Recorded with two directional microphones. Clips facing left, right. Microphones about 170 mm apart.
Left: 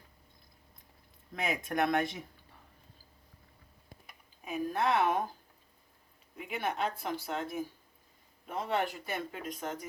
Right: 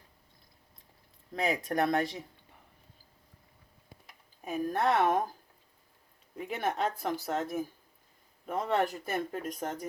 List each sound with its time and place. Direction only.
1.3 s speech: 35° right (ahead or behind)
4.4 s speech: 45° right (ahead or behind)
6.4 s speech: 40° right (ahead or behind)